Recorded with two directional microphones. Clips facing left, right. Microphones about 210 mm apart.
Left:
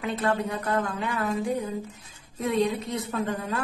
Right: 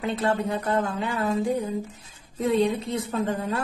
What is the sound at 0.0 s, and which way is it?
A woman's voice, 25° right (ahead or behind).